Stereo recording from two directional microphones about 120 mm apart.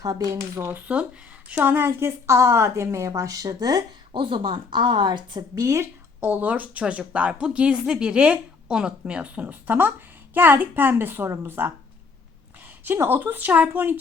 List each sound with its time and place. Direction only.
0.0 s a woman's voice: 30° right (ahead or behind)
4.1 s speech: 40° right (ahead or behind)
5.5 s a woman's voice: 25° right (ahead or behind)
6.2 s speech: 15° right (ahead or behind)
12.8 s speech: 15° right (ahead or behind)